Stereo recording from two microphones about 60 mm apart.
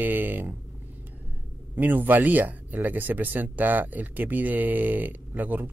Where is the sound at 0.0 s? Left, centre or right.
Right.